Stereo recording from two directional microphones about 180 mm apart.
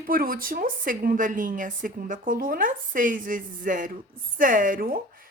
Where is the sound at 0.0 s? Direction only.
55° right (ahead or behind).